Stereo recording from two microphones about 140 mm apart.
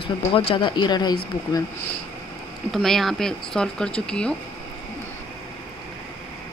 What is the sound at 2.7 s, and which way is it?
Speech, centre (ahead or behind).